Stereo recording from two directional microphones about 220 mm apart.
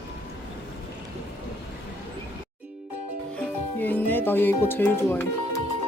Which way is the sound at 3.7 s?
10° left (ahead or behind).